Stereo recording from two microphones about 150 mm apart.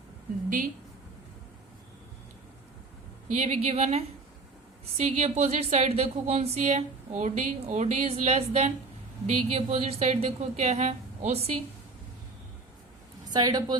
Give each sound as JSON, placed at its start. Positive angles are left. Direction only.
{"t": 3.3, "sound": "speech", "side_deg": -45}
{"t": 13.3, "sound": "speech", "side_deg": -25}